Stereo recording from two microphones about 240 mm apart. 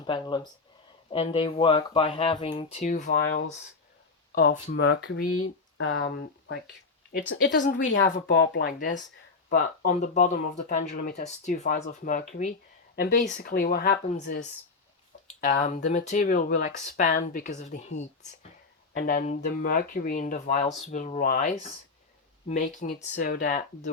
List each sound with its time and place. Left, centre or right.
0.0 s speech: centre; by 4.6 s left
4.9 s speech: left
6.0 s speech: left
8.0 s speech: left